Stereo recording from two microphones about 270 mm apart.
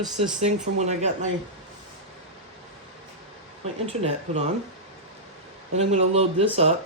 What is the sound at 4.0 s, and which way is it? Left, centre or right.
Speech, right.